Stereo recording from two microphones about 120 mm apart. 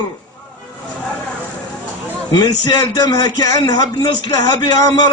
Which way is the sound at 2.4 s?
30° left (ahead or behind).